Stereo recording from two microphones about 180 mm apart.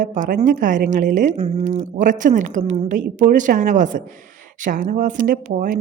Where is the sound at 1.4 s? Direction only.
30° right (ahead or behind).